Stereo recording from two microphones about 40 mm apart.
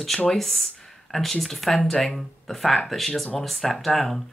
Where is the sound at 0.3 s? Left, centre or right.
Centre.